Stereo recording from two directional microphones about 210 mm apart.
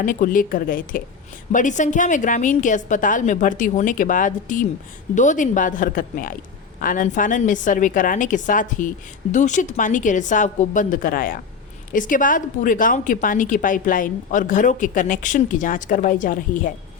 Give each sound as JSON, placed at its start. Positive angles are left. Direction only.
{"t": 0.0, "sound": "a woman's voice", "side_deg": 40}